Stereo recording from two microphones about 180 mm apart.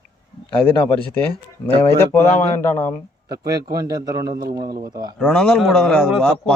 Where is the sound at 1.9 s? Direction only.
15° left (ahead or behind).